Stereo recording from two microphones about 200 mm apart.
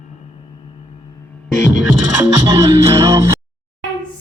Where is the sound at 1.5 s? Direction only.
65° left (ahead or behind).